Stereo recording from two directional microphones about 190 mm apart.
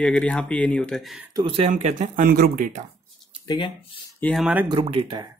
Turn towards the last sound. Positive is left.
turn(degrees=-25)  # may be behind; listen again after turning